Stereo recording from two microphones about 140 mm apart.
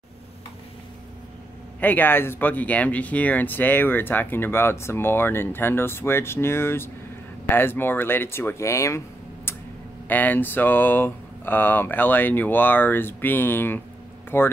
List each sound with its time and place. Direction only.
1.8 s speech: 15° left (ahead or behind)